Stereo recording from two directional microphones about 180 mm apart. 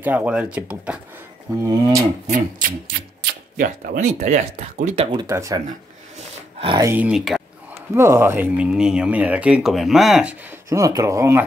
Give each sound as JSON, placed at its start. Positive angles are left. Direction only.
{"t": 0.0, "sound": "speech", "side_deg": -10}
{"t": 1.6, "sound": "speech", "side_deg": -15}
{"t": 2.2, "sound": "speech", "side_deg": -45}
{"t": 5.2, "sound": "speech", "side_deg": -15}
{"t": 6.1, "sound": "a sound", "side_deg": -30}
{"t": 6.8, "sound": "speech", "side_deg": -10}
{"t": 7.9, "sound": "speech", "side_deg": -15}
{"t": 10.7, "sound": "speech", "side_deg": -20}